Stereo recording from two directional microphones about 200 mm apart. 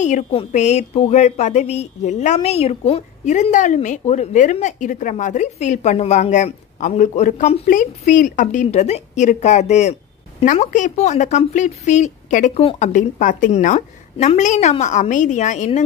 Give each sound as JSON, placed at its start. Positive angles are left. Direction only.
{"t": 0.0, "sound": "speech", "side_deg": 30}